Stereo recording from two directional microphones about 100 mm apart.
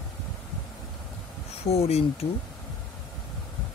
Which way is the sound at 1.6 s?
90° left.